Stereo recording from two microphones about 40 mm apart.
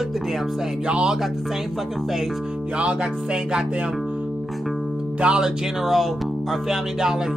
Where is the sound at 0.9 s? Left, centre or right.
Right.